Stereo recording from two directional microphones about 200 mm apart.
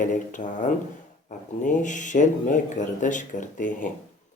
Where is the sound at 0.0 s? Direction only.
40° left (ahead or behind).